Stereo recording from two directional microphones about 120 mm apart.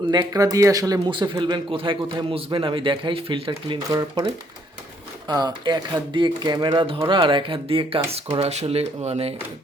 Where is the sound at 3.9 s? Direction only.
30° right (ahead or behind).